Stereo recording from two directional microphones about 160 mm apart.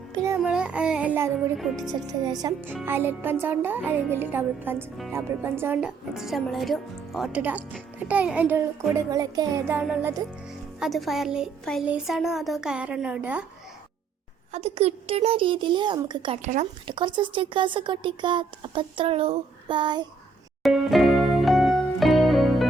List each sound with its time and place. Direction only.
0.1 s music: 20° right (ahead or behind)
0.4 s music: 5° right (ahead or behind)
1.5 s speech: centre (ahead or behind)
2.0 s a woman's voice: 25° right (ahead or behind)
2.8 s a woman's voice: 15° right (ahead or behind)
10.8 s speech: centre (ahead or behind)
14.5 s speech: 40° right (ahead or behind)
16.4 s speech: 50° right (ahead or behind)
16.8 s speech: 30° right (ahead or behind)
20.6 s music: centre (ahead or behind)